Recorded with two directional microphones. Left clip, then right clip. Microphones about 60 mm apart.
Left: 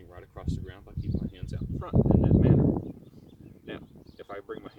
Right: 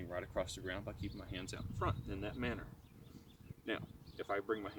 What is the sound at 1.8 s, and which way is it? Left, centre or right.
Speech, right.